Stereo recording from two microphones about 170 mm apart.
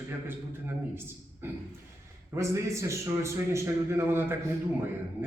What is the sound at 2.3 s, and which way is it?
A man's voice, 15° right (ahead or behind).